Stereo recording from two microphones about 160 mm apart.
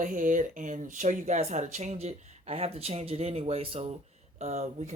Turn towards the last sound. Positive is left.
turn(degrees=-45)  # may be behind; listen again after turning